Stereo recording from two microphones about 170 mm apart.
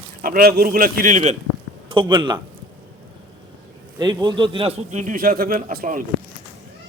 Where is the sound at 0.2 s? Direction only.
60° right (ahead or behind).